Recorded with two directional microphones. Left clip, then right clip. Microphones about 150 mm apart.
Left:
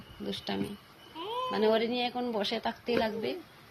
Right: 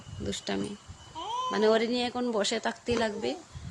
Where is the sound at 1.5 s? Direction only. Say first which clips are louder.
Right 2 dB; 35° right (ahead or behind).